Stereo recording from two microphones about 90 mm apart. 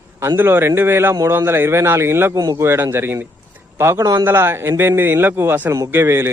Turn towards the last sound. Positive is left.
turn(degrees=-30)  # may be behind; listen again after turning